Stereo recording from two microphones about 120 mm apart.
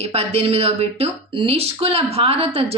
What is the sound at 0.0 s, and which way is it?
Speech, 60° right (ahead or behind).